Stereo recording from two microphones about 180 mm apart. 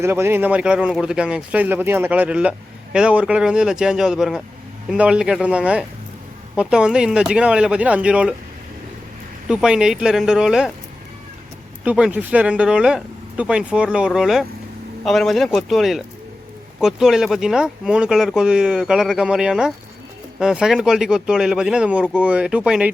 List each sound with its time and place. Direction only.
0.0 s speech: 15° right (ahead or behind)
9.5 s speech: 5° right (ahead or behind)
11.9 s speech: 5° right (ahead or behind)